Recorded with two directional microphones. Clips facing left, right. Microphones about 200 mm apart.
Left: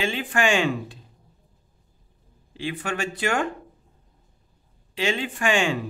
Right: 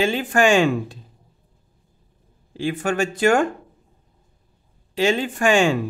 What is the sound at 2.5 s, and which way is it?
Speech, 45° right (ahead or behind).